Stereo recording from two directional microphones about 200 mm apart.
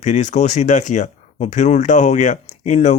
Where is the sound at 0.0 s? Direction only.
35° left (ahead or behind).